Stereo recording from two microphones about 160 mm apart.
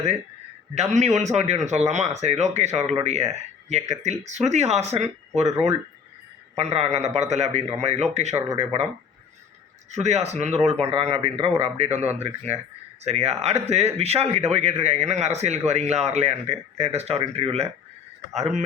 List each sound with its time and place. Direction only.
0.8 s speech: 45° right (ahead or behind)
6.6 s speech: 40° right (ahead or behind)
9.9 s speech: 45° right (ahead or behind)